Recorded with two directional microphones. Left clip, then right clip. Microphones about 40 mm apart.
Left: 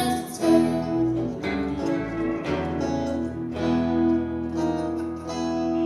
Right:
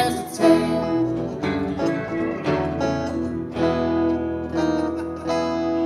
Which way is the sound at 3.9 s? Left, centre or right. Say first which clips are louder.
Right 2 dB; right.